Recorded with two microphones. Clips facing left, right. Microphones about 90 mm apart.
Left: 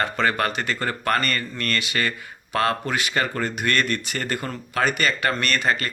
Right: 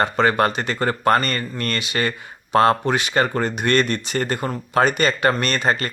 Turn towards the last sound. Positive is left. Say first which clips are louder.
# right 2 dB
turn(degrees=-30)  # may be behind; listen again after turning